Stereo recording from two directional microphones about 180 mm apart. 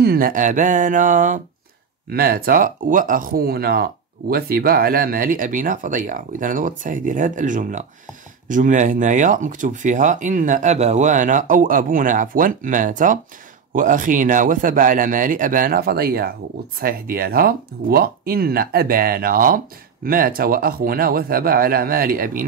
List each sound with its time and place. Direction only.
0.0 s speech: 55° right (ahead or behind)
2.0 s speech: 55° right (ahead or behind)